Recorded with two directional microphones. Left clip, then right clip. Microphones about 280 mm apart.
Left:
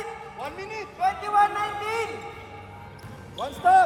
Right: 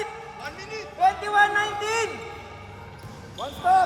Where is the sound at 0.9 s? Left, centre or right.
Right.